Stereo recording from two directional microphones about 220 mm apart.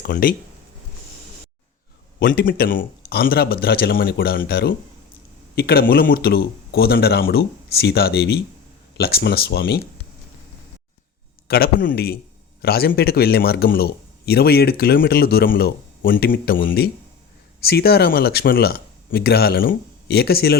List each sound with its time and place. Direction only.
0.0 s speech: 40° left (ahead or behind)
2.1 s a man's voice: 40° left (ahead or behind)
11.4 s a man's voice: 45° left (ahead or behind)